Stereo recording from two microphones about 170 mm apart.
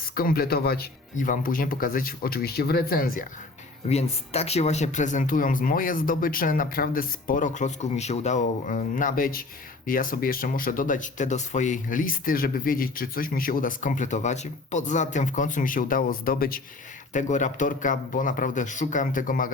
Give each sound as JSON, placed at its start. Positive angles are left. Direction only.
{"t": 0.1, "sound": "speech", "side_deg": 60}
{"t": 1.1, "sound": "speech", "side_deg": 50}
{"t": 3.8, "sound": "speech", "side_deg": 40}
{"t": 17.1, "sound": "speech", "side_deg": 45}